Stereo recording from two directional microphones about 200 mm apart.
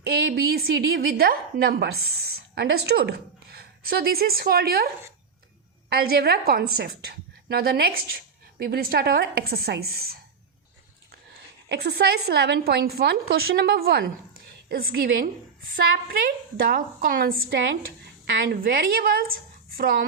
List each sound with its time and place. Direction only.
0.0 s a woman's voice: 50° right (ahead or behind)
5.9 s a woman's voice: 50° right (ahead or behind)
11.7 s a woman's voice: 55° right (ahead or behind)
18.0 s a woman's voice: 55° right (ahead or behind)